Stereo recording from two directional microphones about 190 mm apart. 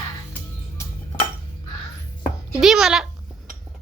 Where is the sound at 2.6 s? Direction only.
5° right (ahead or behind).